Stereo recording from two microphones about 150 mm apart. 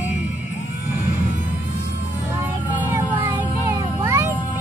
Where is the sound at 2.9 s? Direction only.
15° right (ahead or behind).